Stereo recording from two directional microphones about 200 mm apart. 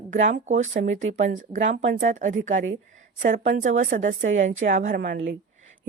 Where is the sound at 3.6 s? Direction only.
35° right (ahead or behind).